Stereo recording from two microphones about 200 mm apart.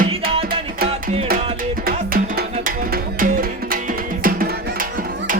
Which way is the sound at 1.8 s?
45° right (ahead or behind).